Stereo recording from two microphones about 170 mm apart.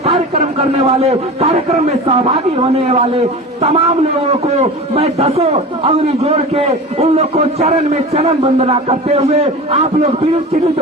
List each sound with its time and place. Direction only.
0.0 s a man's voice: 35° right (ahead or behind)